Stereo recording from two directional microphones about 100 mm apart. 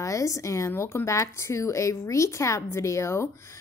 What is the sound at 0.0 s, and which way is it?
A woman's voice, 30° left (ahead or behind).